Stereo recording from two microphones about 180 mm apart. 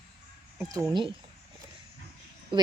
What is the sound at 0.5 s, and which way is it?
Speech, 15° right (ahead or behind).